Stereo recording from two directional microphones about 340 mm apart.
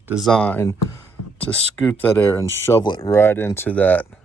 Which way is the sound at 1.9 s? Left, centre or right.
Centre.